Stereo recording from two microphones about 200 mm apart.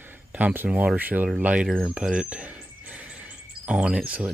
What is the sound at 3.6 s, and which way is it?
Speech, 5° right (ahead or behind).